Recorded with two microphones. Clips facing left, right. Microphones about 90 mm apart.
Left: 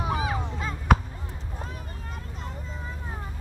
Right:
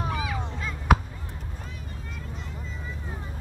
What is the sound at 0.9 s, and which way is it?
Chop, 5° right (ahead or behind).